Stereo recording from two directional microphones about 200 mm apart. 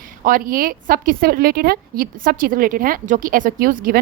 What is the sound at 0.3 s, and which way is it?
A woman's voice, 45° right (ahead or behind).